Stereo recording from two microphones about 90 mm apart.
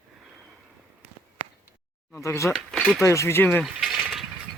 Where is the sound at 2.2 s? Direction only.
35° left (ahead or behind).